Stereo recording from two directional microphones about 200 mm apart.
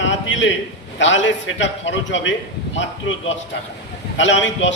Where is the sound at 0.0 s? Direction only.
65° left (ahead or behind).